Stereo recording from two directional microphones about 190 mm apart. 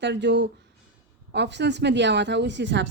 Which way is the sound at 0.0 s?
65° right (ahead or behind).